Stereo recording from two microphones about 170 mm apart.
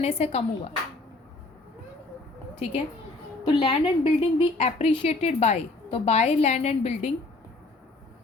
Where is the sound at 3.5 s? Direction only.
30° left (ahead or behind).